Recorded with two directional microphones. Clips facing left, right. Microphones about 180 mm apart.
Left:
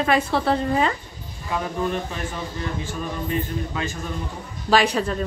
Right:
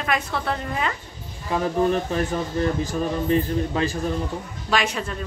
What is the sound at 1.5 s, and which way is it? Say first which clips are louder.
A man's voice: right 4 dB; 35° right (ahead or behind).